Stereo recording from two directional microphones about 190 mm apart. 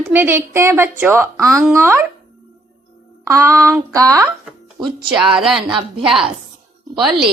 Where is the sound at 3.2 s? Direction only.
15° right (ahead or behind).